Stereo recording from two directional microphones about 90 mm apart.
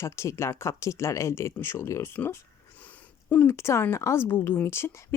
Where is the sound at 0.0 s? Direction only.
30° left (ahead or behind).